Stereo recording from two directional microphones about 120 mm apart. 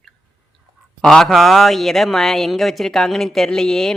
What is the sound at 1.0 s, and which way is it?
Speech, 5° left (ahead or behind).